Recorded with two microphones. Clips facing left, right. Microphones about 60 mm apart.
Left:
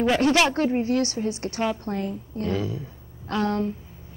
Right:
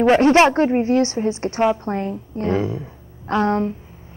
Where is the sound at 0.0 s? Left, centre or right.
Right.